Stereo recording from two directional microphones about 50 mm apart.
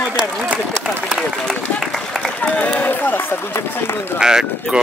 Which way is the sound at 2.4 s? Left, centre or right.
Left.